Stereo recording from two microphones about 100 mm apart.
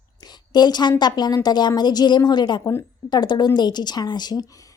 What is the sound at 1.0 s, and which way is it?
A woman's voice, 45° left (ahead or behind).